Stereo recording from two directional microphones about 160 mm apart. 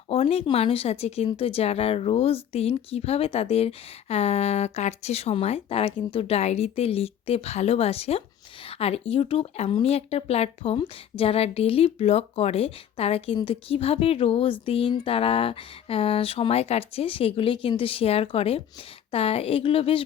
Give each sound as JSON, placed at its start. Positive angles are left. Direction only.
{"t": 0.1, "sound": "speech", "side_deg": 40}